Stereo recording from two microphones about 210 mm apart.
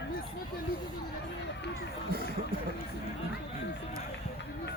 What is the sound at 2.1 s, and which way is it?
Speech, 45° right (ahead or behind).